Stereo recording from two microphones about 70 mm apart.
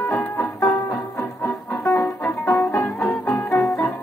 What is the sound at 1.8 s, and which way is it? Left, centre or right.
Music, left.